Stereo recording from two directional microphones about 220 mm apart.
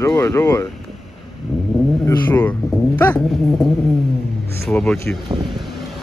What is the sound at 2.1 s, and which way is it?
Speech, 10° left (ahead or behind).